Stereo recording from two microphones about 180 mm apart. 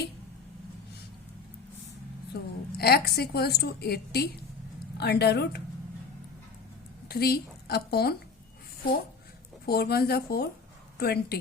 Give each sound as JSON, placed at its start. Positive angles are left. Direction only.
{"t": 2.3, "sound": "a woman's voice", "side_deg": 60}
{"t": 7.1, "sound": "a woman's voice", "side_deg": 60}
{"t": 9.6, "sound": "a woman's voice", "side_deg": 60}